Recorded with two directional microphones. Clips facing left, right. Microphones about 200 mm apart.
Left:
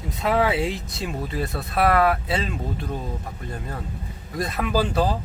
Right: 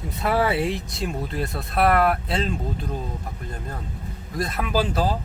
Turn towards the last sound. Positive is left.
turn(degrees=0)  # may be behind; listen again after turning